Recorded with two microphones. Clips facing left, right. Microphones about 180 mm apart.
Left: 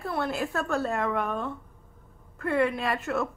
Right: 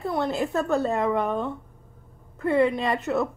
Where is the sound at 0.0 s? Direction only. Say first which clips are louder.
Right 4 dB; 20° right (ahead or behind).